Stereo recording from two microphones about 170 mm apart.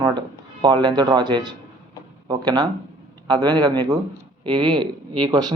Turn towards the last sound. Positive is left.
turn(degrees=-25)  # may be behind; listen again after turning